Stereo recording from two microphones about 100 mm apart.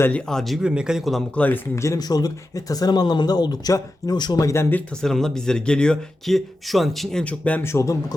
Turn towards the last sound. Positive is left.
turn(degrees=30)  # may be behind; listen again after turning